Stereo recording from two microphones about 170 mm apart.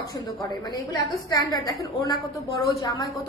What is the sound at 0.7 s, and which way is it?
A woman's voice, 20° left (ahead or behind).